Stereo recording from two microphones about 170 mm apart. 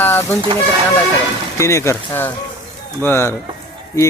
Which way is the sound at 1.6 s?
15° left (ahead or behind).